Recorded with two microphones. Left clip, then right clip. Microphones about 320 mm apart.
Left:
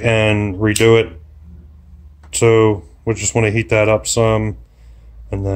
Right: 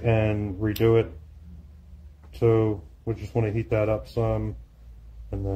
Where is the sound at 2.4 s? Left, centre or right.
Left.